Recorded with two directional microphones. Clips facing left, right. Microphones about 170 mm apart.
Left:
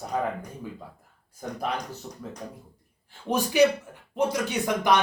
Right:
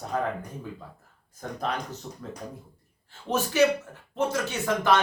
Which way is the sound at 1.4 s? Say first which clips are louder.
Even; 10° left (ahead or behind).